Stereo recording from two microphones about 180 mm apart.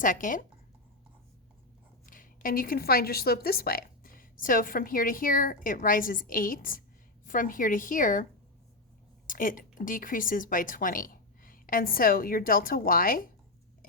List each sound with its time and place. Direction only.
0.0 s a woman's voice: 50° left (ahead or behind)
2.0 s a woman's voice: 50° left (ahead or behind)